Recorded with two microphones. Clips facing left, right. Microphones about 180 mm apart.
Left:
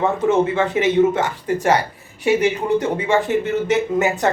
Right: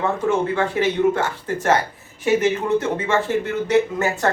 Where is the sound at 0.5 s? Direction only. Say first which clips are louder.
Left 3 dB; 20° left (ahead or behind).